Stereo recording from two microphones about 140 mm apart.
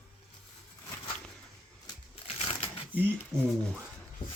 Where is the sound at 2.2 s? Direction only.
45° left (ahead or behind).